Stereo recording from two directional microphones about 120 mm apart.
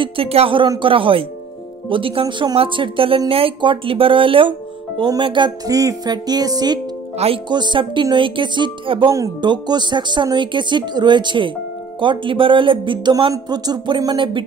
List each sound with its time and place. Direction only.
0.0 s speech: 50° right (ahead or behind)
5.7 s speech: 30° right (ahead or behind); by 9.1 s 45° right (ahead or behind)
9.1 s speech: 35° right (ahead or behind)